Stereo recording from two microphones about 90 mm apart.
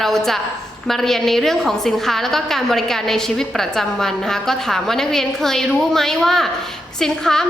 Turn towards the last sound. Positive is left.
turn(degrees=5)  # may be behind; listen again after turning